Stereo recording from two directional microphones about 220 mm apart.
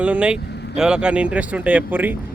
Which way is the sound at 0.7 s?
5° right (ahead or behind).